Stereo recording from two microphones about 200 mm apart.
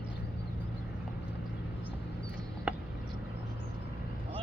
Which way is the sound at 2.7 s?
5° right (ahead or behind).